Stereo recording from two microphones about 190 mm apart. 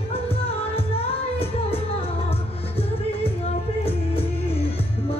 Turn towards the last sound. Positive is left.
turn(degrees=30)  # may be behind; listen again after turning